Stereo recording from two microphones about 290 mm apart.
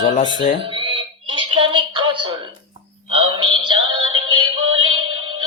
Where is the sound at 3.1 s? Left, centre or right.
Centre.